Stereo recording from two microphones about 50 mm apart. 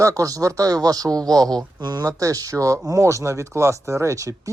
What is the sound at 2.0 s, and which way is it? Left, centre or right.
Speech, right.